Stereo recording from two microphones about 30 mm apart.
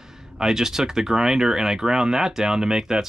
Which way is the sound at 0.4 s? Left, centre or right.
Centre.